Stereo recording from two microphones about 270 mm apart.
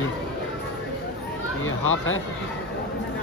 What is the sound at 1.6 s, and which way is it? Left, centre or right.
Speech, left.